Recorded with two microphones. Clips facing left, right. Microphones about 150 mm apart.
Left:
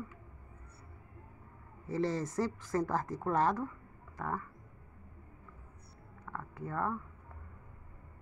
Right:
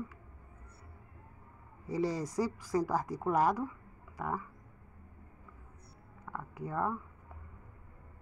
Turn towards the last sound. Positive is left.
turn(degrees=-15)  # may be behind; listen again after turning